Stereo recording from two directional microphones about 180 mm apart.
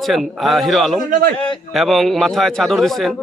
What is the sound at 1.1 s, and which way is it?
Speech, 55° right (ahead or behind).